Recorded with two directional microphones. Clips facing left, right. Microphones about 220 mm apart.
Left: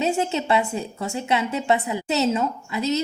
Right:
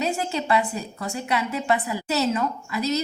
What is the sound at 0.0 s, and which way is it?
A woman's voice, 25° left (ahead or behind).